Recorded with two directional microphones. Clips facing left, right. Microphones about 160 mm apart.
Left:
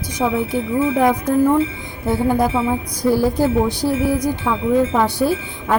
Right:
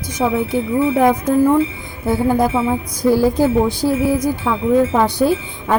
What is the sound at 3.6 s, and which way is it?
Speech, 15° left (ahead or behind).